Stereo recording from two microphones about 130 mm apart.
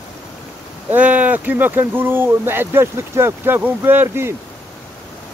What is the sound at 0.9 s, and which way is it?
Speech, 10° right (ahead or behind).